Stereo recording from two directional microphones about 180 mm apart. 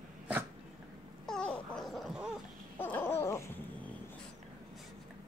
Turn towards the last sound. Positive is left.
turn(degrees=15)  # may be behind; listen again after turning